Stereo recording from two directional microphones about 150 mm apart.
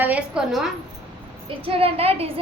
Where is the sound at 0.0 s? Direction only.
10° right (ahead or behind).